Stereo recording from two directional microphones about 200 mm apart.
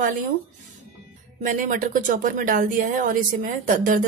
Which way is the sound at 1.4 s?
40° right (ahead or behind).